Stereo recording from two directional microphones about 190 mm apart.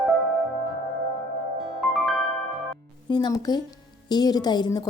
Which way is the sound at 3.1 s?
20° left (ahead or behind).